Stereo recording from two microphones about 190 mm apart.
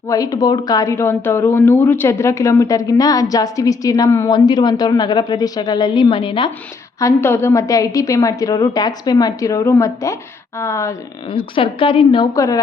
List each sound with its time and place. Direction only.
0.1 s speech: 20° left (ahead or behind)
7.0 s a woman's voice: 10° left (ahead or behind)
11.3 s speech: 30° left (ahead or behind)